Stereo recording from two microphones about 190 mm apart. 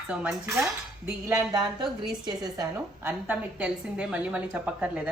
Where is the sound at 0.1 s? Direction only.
5° right (ahead or behind).